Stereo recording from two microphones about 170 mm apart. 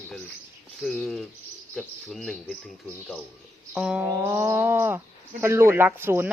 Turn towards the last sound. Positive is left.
turn(degrees=-10)  # may be behind; listen again after turning